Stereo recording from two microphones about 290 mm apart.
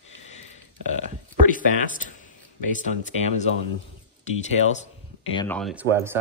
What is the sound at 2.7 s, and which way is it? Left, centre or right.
Speech, left.